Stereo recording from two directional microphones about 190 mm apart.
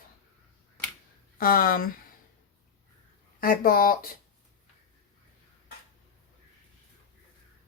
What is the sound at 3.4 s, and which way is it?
Speech, 50° left (ahead or behind).